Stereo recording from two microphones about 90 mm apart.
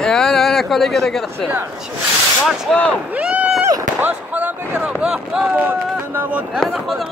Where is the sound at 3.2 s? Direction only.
15° right (ahead or behind).